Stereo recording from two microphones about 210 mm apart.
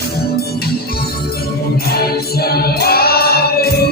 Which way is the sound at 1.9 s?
50° left (ahead or behind).